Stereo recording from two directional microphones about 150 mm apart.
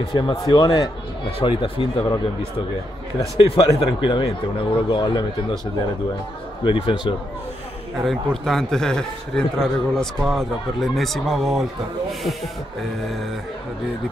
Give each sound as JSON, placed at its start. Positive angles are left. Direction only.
{"t": 0.1, "sound": "a man's voice", "side_deg": 30}
{"t": 3.4, "sound": "a man's voice", "side_deg": 40}
{"t": 6.6, "sound": "a man's voice", "side_deg": 35}
{"t": 8.0, "sound": "a man's voice", "side_deg": 0}